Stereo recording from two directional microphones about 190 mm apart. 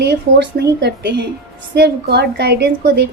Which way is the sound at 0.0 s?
60° right (ahead or behind).